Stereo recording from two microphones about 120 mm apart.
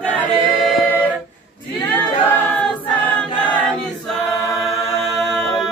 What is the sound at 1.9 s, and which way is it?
A capella, 15° left (ahead or behind).